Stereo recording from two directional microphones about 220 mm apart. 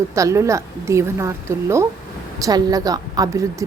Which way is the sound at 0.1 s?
15° right (ahead or behind).